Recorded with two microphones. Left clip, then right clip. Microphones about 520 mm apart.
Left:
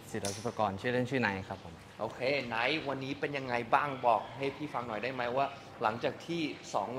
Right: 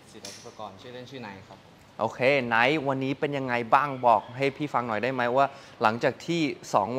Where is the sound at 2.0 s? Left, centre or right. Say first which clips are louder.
Right 9 dB; right.